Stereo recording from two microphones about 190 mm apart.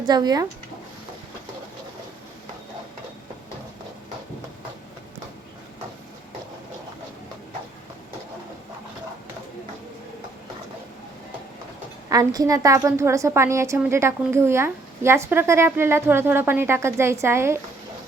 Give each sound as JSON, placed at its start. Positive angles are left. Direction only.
{"t": 0.0, "sound": "speech", "side_deg": -20}
{"t": 12.0, "sound": "a woman's voice", "side_deg": -20}